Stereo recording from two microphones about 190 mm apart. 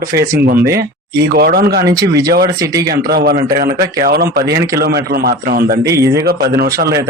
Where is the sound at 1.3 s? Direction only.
55° right (ahead or behind).